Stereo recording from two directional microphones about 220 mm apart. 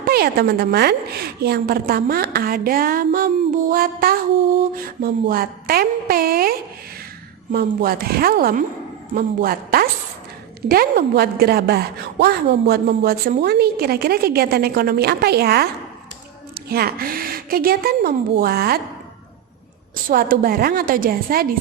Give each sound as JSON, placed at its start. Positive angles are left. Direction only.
{"t": 0.0, "sound": "a woman's voice", "side_deg": -45}
{"t": 5.3, "sound": "a woman's voice", "side_deg": -40}
{"t": 20.1, "sound": "a woman's voice", "side_deg": -40}